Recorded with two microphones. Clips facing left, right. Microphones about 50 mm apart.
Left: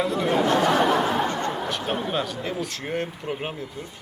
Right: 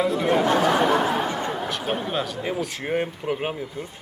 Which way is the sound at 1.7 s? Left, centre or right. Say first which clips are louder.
Even; centre.